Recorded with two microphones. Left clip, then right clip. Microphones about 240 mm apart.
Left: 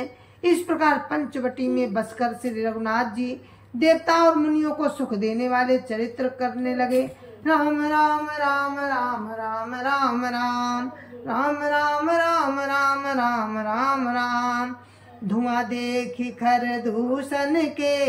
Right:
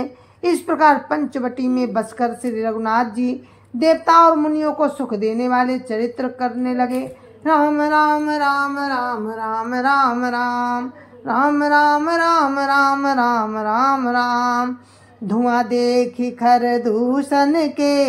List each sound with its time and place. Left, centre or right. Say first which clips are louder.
0.0 s a woman's voice: right 3 dB; centre